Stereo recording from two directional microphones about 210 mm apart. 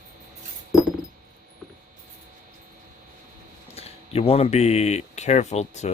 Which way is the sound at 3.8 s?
30° left (ahead or behind).